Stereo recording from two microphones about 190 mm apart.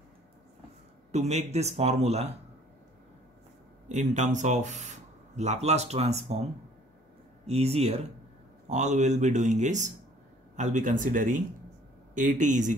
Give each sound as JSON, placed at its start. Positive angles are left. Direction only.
{"t": 1.1, "sound": "speech", "side_deg": -35}
{"t": 3.9, "sound": "speech", "side_deg": -40}
{"t": 7.4, "sound": "speech", "side_deg": -35}